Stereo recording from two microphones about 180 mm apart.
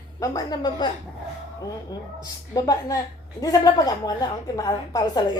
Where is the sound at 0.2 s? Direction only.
20° left (ahead or behind).